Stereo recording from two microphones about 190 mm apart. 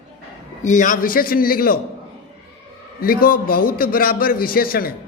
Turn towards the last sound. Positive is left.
turn(degrees=50)  # may be behind; listen again after turning